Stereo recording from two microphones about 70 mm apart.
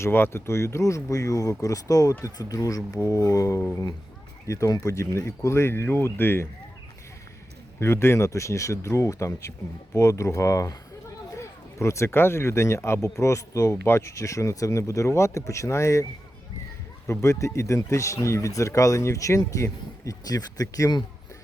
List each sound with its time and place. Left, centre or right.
0.0 s speech: left
7.8 s speech: left
17.1 s speech: left